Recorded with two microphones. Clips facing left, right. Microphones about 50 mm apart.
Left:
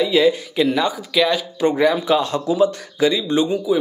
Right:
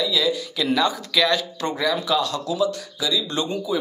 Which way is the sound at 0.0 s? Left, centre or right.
Left.